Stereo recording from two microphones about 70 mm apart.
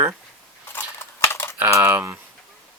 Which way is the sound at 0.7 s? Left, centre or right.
Left.